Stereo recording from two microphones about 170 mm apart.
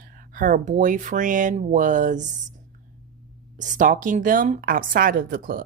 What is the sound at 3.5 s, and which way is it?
A woman's voice, 45° right (ahead or behind).